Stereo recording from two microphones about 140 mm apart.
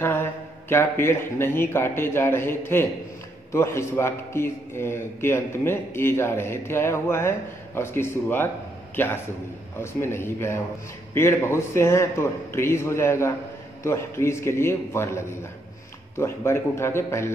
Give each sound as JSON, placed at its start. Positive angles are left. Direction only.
{"t": 0.0, "sound": "a man's voice", "side_deg": 15}